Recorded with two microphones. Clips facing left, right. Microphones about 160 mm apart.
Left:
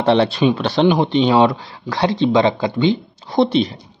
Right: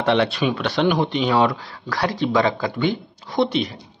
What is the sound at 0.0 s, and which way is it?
Speech, 30° left (ahead or behind).